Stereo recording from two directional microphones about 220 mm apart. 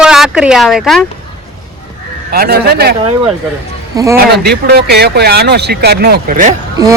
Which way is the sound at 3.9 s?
15° right (ahead or behind).